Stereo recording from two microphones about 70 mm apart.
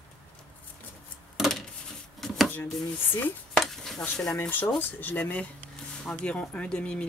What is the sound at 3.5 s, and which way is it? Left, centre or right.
Dishes, centre.